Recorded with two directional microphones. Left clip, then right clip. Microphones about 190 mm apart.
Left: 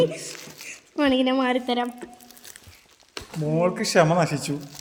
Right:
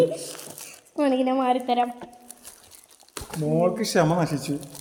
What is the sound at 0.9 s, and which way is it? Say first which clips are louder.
Speech: left 1 dB; 40° left (ahead or behind).